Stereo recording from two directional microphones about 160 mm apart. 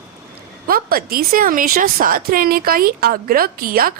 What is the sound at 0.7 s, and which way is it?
A woman's voice, 65° right (ahead or behind).